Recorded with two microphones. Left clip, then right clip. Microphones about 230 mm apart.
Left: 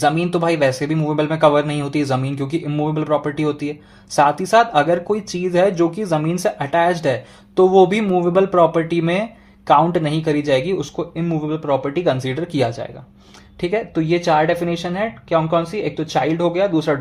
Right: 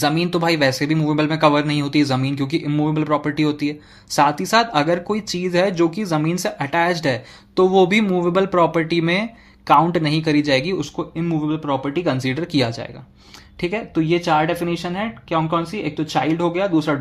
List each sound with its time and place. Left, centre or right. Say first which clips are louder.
0.0 s speech: left 2 dB; right
10.8 s speech: left 1 dB; right
12.2 s speech: left 1 dB; right
14.2 s speech: left 5 dB; right
15.8 s speech: left 2 dB; right
16.4 s speech: left 2 dB; right